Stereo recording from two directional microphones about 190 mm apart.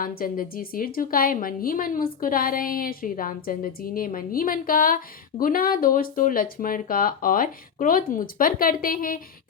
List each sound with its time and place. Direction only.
0.2 s a woman's voice: 50° left (ahead or behind)